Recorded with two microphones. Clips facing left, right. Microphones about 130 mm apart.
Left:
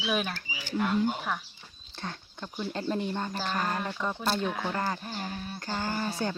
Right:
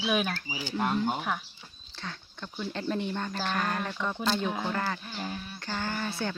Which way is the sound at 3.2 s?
15° left (ahead or behind).